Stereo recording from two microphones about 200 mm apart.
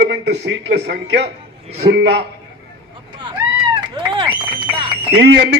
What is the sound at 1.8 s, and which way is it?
Speech, 60° right (ahead or behind).